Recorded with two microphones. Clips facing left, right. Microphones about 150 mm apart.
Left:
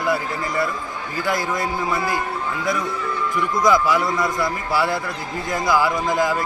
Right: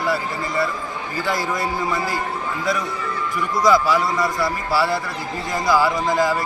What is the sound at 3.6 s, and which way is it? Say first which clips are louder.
A man's voice: right 1 dB; 20° left (ahead or behind).